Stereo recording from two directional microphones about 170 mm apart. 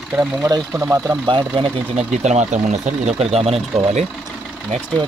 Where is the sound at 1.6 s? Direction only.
30° right (ahead or behind).